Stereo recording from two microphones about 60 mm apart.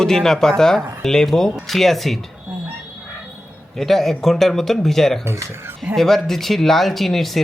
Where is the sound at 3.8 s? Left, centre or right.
Centre.